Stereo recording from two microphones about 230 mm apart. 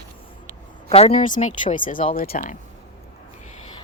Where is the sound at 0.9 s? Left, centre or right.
Left.